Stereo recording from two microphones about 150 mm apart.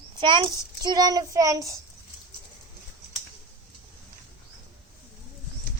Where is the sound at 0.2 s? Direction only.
30° right (ahead or behind).